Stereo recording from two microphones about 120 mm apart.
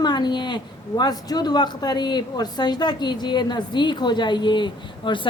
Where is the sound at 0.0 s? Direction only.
35° left (ahead or behind).